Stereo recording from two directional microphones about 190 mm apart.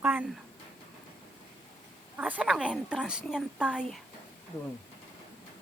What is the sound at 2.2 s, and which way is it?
A woman's voice, 5° right (ahead or behind).